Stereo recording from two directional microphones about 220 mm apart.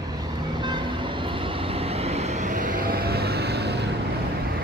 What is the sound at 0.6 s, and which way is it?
Vehicle, 20° right (ahead or behind).